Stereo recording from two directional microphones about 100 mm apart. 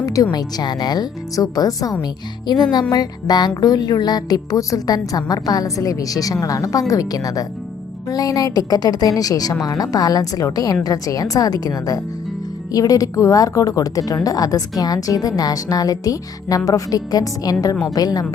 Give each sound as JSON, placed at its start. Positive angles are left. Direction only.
{"t": 0.0, "sound": "music", "side_deg": 35}
{"t": 0.3, "sound": "speech", "side_deg": 45}